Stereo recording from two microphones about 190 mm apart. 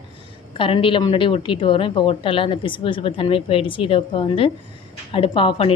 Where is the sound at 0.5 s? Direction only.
30° left (ahead or behind).